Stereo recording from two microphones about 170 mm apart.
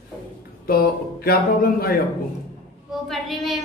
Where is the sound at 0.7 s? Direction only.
60° left (ahead or behind).